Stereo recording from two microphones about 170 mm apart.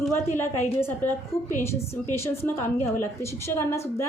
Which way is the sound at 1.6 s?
15° left (ahead or behind).